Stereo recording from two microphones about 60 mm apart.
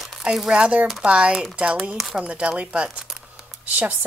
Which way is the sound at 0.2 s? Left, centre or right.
Centre.